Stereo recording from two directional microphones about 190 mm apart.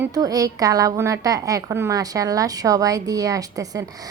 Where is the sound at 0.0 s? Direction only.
20° right (ahead or behind).